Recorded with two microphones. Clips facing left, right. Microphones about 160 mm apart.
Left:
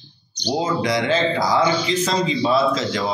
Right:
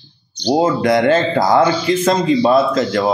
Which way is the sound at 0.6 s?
55° right (ahead or behind).